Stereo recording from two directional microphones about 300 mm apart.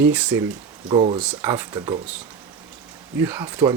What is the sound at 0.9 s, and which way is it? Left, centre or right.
Speech, centre.